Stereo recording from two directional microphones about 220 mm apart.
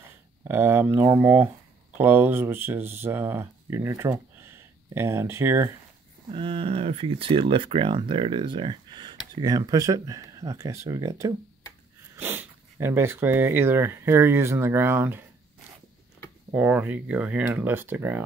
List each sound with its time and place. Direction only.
0.5 s speech: 10° right (ahead or behind)
6.3 s speech: 25° right (ahead or behind)
16.5 s speech: 5° right (ahead or behind)